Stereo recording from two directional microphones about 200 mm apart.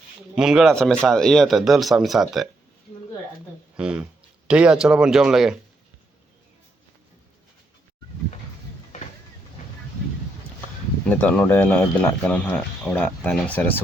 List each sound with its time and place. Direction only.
0.3 s speech: centre (ahead or behind)
3.8 s speech: 5° right (ahead or behind)
11.0 s speech: 5° left (ahead or behind)